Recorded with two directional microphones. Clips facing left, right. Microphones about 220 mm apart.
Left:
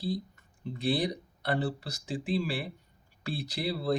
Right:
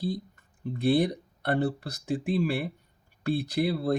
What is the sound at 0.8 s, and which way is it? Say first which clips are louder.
Speech: right 6 dB; 55° right (ahead or behind).